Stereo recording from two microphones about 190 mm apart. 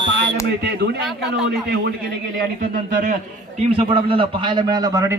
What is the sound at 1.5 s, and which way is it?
Speech, 60° right (ahead or behind).